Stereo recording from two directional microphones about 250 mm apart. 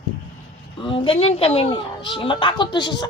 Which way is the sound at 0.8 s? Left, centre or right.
Left.